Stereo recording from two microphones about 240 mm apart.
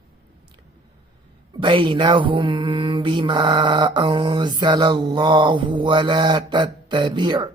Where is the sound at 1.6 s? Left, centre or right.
Right.